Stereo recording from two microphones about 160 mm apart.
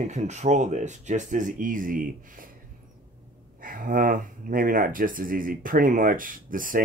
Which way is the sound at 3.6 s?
60° right (ahead or behind).